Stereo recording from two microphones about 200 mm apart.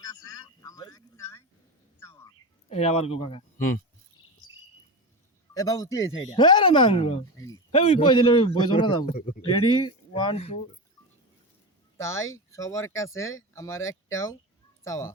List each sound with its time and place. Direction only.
0.0 s a sound: 20° left (ahead or behind)
2.6 s a man's voice: 30° left (ahead or behind)
5.5 s a man's voice: 20° left (ahead or behind); by 9.4 s 35° left (ahead or behind)
9.4 s speech: 25° left (ahead or behind)
11.9 s speech: 15° left (ahead or behind)